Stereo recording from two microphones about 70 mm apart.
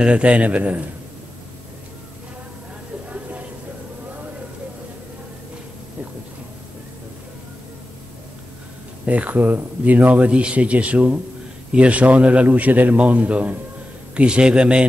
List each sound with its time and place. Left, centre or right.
0.0 s a man's voice: centre
9.0 s a man's voice: right